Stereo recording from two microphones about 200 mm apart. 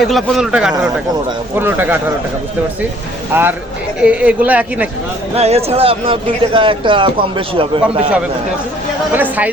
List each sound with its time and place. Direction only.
0.0 s speech: centre (ahead or behind)
3.3 s speech: 10° right (ahead or behind)
5.3 s speech: 30° right (ahead or behind)